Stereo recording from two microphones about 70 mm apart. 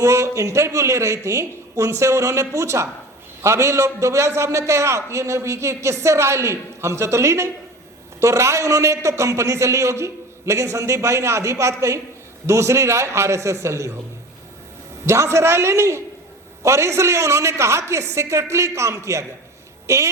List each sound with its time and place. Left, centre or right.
0.0 s a man's voice: right
15.0 s a man's voice: right